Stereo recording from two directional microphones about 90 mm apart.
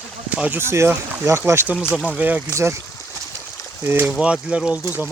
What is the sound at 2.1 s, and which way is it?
Speech, 15° right (ahead or behind).